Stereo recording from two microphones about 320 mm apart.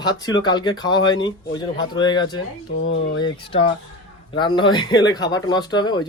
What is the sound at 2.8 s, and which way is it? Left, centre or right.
Speech, left.